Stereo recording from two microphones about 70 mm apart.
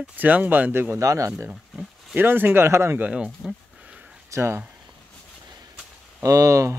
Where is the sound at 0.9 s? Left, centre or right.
Right.